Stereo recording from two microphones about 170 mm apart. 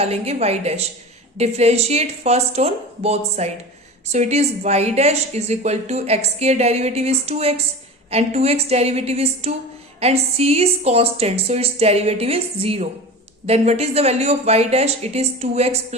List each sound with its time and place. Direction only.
0.0 s a woman's voice: 35° right (ahead or behind)